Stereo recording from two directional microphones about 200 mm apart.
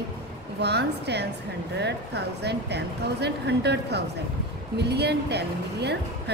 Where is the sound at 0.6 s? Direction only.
55° right (ahead or behind).